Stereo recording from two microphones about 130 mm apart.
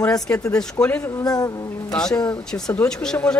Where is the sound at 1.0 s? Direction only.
30° left (ahead or behind).